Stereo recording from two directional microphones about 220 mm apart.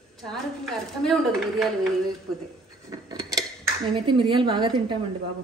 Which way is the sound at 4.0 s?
20° right (ahead or behind).